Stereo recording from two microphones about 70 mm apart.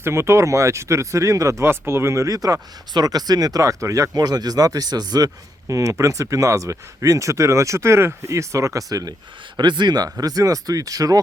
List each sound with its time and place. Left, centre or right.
0.0 s speech: right
9.6 s speech: right